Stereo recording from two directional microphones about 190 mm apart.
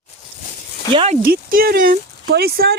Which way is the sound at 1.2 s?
50° right (ahead or behind).